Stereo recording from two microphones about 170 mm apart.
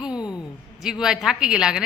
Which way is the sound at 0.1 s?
25° left (ahead or behind).